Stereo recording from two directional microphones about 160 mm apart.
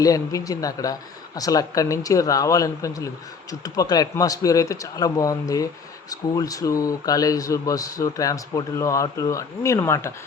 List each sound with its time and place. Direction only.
0.0 s speech: 20° left (ahead or behind)